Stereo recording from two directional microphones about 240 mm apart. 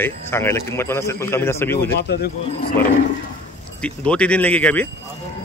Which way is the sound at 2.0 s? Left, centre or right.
Left.